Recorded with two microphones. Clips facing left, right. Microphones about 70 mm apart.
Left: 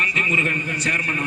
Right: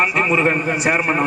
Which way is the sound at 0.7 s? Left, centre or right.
Centre.